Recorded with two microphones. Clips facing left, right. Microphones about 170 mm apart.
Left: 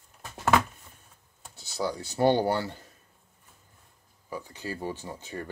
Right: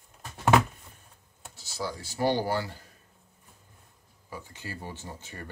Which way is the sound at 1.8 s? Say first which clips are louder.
Left 4 dB; 25° left (ahead or behind).